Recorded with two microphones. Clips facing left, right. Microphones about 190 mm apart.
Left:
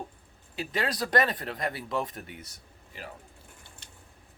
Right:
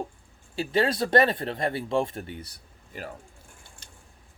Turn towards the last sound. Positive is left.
turn(degrees=-45)  # may be behind; listen again after turning